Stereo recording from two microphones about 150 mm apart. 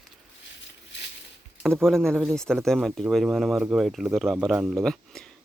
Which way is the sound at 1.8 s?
5° left (ahead or behind).